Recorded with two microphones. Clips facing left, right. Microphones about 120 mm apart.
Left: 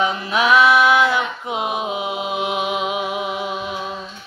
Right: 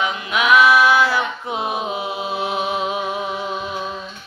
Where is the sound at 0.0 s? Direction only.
30° left (ahead or behind); by 3.7 s 15° left (ahead or behind).